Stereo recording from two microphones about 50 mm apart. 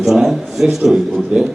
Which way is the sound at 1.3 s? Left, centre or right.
Right.